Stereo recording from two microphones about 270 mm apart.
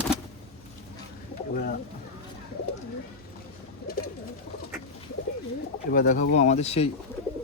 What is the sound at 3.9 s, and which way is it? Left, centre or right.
Bird, left.